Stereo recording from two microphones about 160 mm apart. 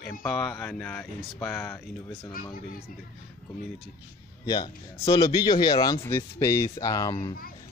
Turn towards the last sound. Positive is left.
turn(degrees=25)  # may be behind; listen again after turning